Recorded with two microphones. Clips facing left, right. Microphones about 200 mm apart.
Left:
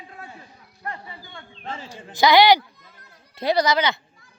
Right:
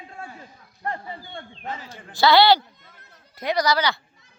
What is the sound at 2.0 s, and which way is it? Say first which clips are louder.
Speech: left 1 dB; 20° left (ahead or behind).